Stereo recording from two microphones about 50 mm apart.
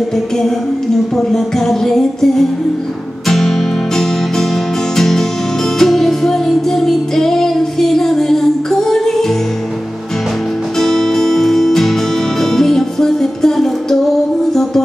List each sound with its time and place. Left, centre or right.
1.1 s music: centre
10.8 s music: centre